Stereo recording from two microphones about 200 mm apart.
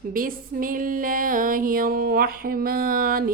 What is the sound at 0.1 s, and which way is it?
A woman's voice, 45° right (ahead or behind).